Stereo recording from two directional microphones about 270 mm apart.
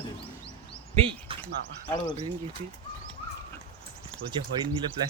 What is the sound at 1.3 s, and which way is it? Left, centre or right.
Speech, centre.